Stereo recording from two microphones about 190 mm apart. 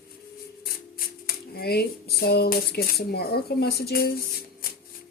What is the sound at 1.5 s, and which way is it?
Speech, 55° left (ahead or behind).